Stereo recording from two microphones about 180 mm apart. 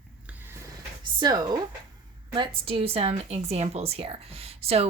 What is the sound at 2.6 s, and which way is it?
Speech, 30° right (ahead or behind).